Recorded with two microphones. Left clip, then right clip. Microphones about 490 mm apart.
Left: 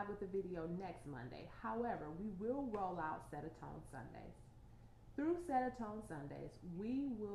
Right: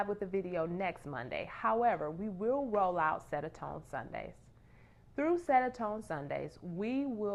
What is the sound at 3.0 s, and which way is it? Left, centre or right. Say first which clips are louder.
A woman's voice: right 12 dB; right.